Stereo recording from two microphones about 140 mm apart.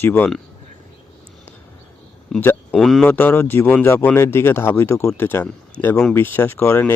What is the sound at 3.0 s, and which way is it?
Speech, 15° left (ahead or behind).